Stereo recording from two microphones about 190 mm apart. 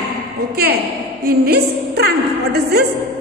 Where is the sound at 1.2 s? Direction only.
55° right (ahead or behind).